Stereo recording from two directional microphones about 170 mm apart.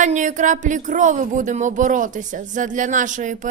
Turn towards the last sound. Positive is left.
turn(degrees=-50)  # may be behind; listen again after turning